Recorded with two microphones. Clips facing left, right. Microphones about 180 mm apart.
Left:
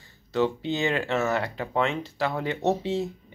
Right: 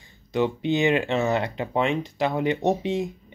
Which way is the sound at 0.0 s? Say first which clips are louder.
Right 1 dB; 15° right (ahead or behind).